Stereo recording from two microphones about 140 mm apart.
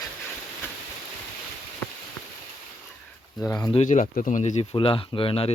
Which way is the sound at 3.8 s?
70° left (ahead or behind).